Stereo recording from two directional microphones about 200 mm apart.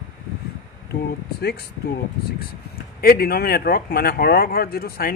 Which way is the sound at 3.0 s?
50° left (ahead or behind).